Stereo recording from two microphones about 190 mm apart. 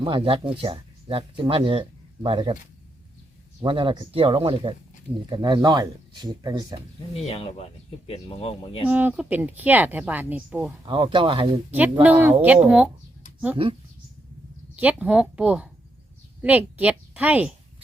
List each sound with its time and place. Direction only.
0.0 s speech: 25° right (ahead or behind)
3.6 s speech: 25° right (ahead or behind)
7.1 s speech: 30° left (ahead or behind)
8.9 s speech: 10° right (ahead or behind)
10.8 s speech: 25° right (ahead or behind)
12.0 s speech: 10° right (ahead or behind)
14.8 s a woman's voice: 5° right (ahead or behind)